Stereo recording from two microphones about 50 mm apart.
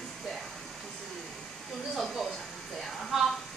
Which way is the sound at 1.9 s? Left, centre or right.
Centre.